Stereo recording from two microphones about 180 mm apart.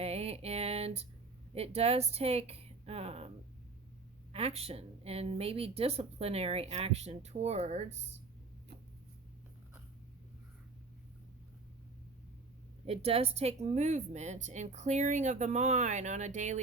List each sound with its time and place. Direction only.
0.0 s a sound: 35° right (ahead or behind)
1.5 s a woman's voice: 35° right (ahead or behind)
12.8 s a woman's voice: 35° right (ahead or behind)